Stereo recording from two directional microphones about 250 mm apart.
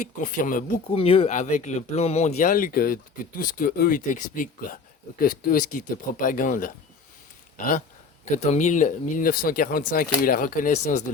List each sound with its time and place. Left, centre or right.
0.0 s speech: left